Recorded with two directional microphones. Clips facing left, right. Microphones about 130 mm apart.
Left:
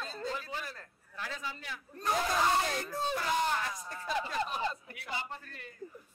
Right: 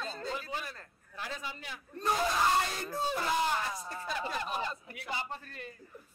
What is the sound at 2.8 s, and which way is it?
Speech, centre (ahead or behind).